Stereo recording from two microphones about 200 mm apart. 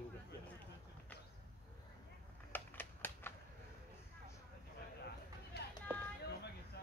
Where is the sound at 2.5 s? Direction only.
10° left (ahead or behind).